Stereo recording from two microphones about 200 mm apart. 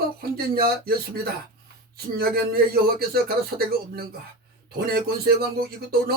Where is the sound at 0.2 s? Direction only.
50° right (ahead or behind).